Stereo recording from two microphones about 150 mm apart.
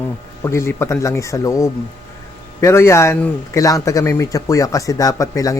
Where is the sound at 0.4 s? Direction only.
15° left (ahead or behind).